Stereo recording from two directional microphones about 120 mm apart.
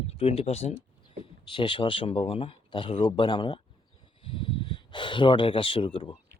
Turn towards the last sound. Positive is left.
turn(degrees=50)  # may be behind; listen again after turning